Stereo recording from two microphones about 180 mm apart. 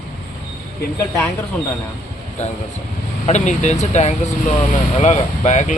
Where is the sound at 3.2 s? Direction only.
40° left (ahead or behind).